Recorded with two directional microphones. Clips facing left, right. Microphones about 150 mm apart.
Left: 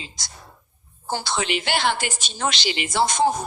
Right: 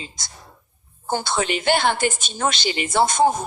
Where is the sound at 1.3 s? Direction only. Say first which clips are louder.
Right 5 dB; 50° right (ahead or behind).